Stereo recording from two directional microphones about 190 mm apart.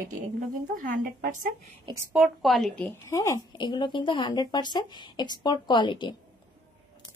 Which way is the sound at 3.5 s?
25° left (ahead or behind).